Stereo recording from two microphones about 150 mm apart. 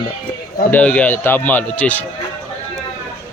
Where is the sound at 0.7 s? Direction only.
10° left (ahead or behind).